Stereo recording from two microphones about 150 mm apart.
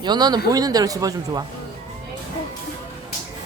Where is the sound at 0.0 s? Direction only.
30° right (ahead or behind).